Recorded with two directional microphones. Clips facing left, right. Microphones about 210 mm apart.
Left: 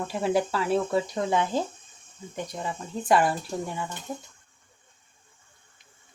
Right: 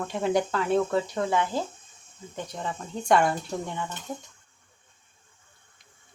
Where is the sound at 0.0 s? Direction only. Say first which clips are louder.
Even; 5° left (ahead or behind).